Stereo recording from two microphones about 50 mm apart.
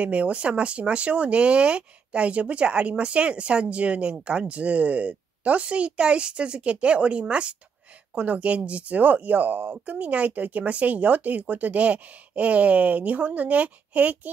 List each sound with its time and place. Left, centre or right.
0.0 s speech: right